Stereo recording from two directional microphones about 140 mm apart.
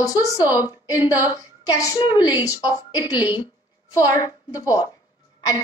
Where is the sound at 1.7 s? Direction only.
30° left (ahead or behind).